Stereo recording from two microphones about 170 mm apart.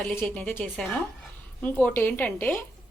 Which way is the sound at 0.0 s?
10° left (ahead or behind).